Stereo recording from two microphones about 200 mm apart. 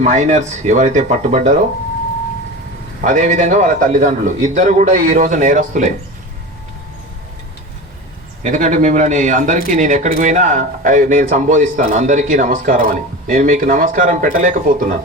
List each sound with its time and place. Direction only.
0.0 s speech: 35° right (ahead or behind)
3.0 s speech: 40° right (ahead or behind)
8.4 s speech: 40° right (ahead or behind)